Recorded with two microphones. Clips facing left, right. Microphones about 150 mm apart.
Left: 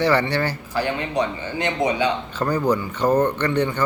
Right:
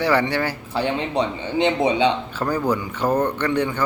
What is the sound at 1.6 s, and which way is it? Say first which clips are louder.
Speech: right 3 dB; 25° right (ahead or behind).